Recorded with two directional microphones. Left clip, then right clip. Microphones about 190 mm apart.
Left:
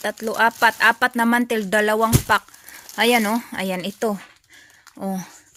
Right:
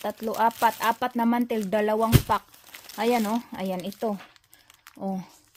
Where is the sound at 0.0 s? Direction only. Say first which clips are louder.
Left 5 dB; 5° left (ahead or behind).